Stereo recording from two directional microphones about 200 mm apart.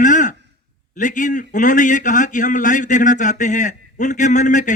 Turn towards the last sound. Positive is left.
turn(degrees=40)  # may be behind; listen again after turning